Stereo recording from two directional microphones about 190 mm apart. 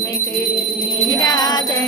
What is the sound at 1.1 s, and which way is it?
Music, 20° left (ahead or behind).